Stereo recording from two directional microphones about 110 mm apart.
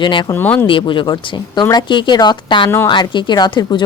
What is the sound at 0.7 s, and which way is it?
Speech, 50° left (ahead or behind).